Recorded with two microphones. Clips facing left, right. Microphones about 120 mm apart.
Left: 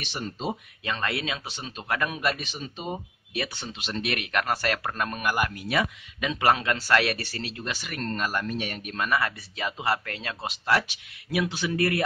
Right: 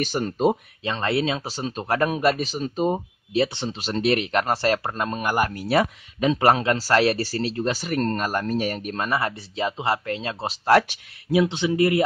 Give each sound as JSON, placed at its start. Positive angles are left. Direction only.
{"t": 0.0, "sound": "speech", "side_deg": -50}
{"t": 0.8, "sound": "speech", "side_deg": -30}
{"t": 3.4, "sound": "speech", "side_deg": -25}